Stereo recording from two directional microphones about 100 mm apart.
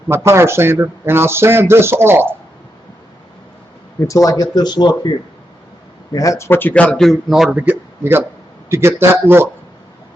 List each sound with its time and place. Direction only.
0.1 s a man's voice: 25° right (ahead or behind)
4.0 s speech: 35° left (ahead or behind)
6.1 s speech: 30° left (ahead or behind); by 7.5 s centre (ahead or behind)
7.5 s a man's voice: 15° right (ahead or behind)